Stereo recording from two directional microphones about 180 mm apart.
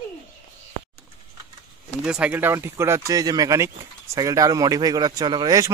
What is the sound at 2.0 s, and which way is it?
Speech, 5° right (ahead or behind).